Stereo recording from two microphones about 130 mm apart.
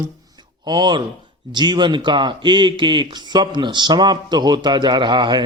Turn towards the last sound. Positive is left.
turn(degrees=-35)  # may be behind; listen again after turning